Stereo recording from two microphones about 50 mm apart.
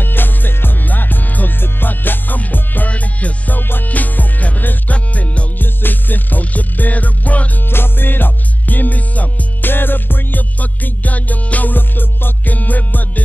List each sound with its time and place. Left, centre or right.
0.0 s music: left
5.6 s music: left
7.7 s music: left
9.7 s music: left